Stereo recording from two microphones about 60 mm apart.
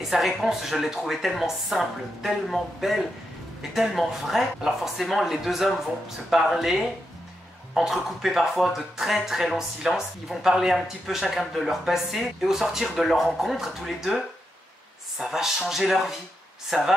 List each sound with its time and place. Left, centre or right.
0.0 s speech: centre